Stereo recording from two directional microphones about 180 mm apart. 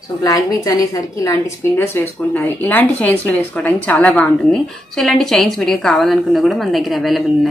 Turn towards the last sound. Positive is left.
turn(degrees=0)  # may be behind; listen again after turning